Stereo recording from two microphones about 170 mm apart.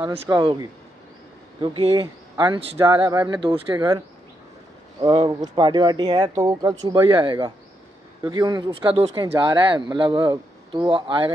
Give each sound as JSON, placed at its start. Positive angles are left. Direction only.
{"t": 0.0, "sound": "speech", "side_deg": -30}
{"t": 5.0, "sound": "speech", "side_deg": -25}